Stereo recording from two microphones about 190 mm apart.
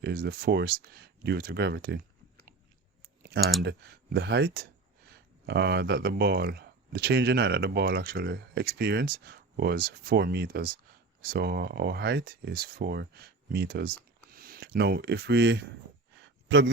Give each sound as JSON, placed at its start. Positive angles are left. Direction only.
{"t": 0.0, "sound": "speech", "side_deg": -55}
{"t": 3.6, "sound": "speech", "side_deg": -60}
{"t": 16.2, "sound": "a sound", "side_deg": -70}